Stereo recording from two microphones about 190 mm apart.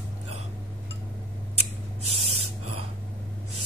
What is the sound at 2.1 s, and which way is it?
Gasp, 30° right (ahead or behind).